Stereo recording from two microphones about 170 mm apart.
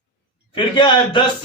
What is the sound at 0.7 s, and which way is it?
Speech, 25° left (ahead or behind).